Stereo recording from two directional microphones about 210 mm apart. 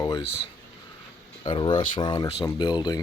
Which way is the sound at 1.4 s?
20° left (ahead or behind).